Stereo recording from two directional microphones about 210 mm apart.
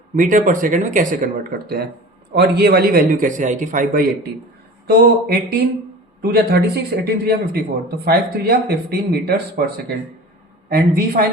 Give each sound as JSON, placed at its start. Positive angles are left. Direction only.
{"t": 0.2, "sound": "speech", "side_deg": -40}